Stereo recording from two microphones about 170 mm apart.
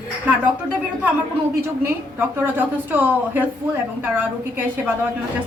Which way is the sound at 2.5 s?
10° right (ahead or behind).